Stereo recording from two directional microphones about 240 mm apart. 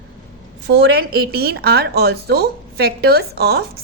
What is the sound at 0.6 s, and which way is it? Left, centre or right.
A woman's voice, right.